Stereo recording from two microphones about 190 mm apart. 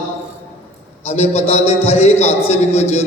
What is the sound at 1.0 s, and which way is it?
A man's voice, 35° left (ahead or behind).